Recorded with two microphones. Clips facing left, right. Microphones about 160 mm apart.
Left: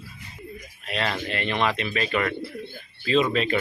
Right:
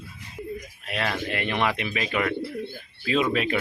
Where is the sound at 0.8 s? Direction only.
10° right (ahead or behind).